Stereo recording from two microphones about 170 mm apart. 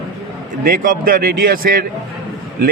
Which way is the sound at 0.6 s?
55° right (ahead or behind).